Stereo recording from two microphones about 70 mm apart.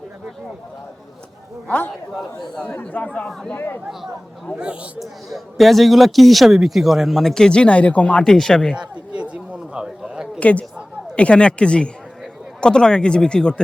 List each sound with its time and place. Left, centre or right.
1.6 s speech: left
2.6 s speech: centre
3.2 s speech: centre
4.5 s a man's voice: centre
4.9 s a man's voice: centre
8.2 s speech: centre
8.7 s a sound: centre
10.4 s speech: centre